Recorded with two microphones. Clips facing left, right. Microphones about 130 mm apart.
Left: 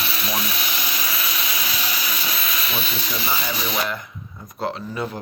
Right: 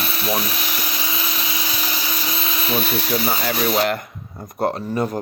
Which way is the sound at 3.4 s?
55° right (ahead or behind).